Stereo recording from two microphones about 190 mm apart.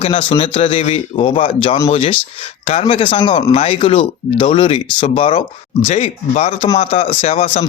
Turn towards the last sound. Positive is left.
turn(degrees=30)  # may be behind; listen again after turning